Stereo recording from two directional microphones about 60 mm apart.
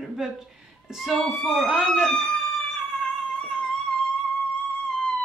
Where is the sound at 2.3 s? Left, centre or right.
Centre.